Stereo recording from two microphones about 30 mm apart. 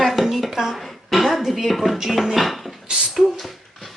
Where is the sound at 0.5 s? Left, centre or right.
Centre.